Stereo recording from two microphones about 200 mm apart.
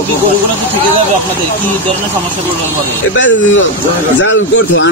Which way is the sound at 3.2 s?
70° left (ahead or behind).